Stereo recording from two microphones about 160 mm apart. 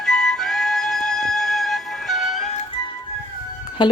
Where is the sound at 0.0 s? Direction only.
5° left (ahead or behind).